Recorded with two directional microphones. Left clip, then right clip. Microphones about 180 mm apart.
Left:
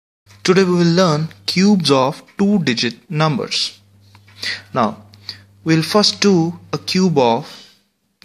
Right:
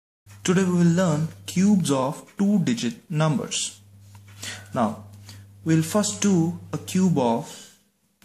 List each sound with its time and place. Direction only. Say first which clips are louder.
0.4 s speech: left 9 dB; 25° left (ahead or behind)
4.4 s a sound: left 8 dB; 25° left (ahead or behind)
6.1 s speech: left 9 dB; 30° left (ahead or behind)